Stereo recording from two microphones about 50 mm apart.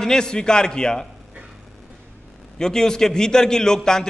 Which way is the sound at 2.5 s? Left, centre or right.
Centre.